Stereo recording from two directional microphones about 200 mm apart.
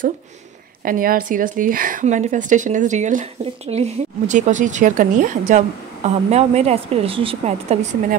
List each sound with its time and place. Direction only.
0.8 s a woman's voice: 45° right (ahead or behind)